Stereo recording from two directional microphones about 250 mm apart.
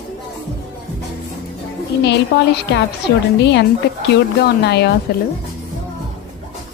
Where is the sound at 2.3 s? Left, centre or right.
Left.